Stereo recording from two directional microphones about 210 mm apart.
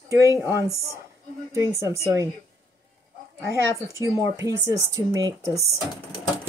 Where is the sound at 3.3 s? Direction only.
15° right (ahead or behind).